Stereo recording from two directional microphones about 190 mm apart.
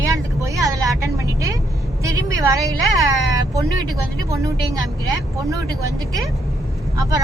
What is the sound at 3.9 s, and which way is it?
A woman's voice, 15° right (ahead or behind).